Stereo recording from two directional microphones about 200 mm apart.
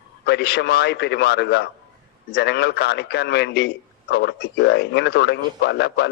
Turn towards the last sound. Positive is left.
turn(degrees=55)  # may be behind; listen again after turning